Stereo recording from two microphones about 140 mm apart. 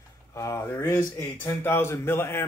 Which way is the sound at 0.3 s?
20° left (ahead or behind).